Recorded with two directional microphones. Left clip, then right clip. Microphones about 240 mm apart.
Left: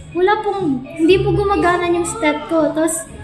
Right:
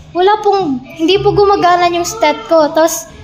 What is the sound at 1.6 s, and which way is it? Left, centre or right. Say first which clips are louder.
A woman's voice: right 6 dB; right.